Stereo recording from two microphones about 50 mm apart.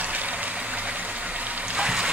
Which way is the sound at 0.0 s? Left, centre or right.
Right.